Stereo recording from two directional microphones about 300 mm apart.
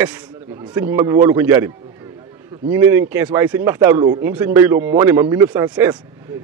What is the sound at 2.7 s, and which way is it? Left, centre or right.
Speech, centre.